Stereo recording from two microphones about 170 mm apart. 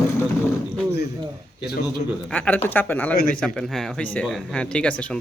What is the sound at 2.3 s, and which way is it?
Speech, 10° left (ahead or behind).